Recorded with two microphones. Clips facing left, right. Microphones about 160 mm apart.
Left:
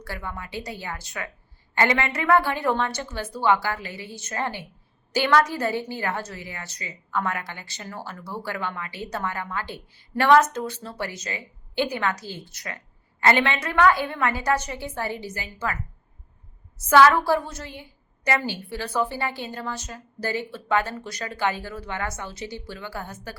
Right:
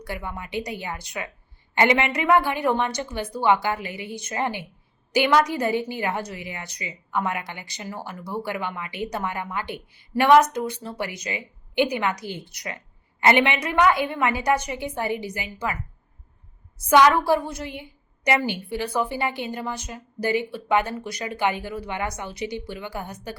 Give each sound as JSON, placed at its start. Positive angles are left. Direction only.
{"t": 0.0, "sound": "a woman's voice", "side_deg": -15}